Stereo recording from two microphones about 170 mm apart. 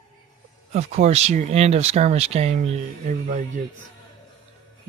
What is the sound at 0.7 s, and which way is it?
Speech, 40° right (ahead or behind).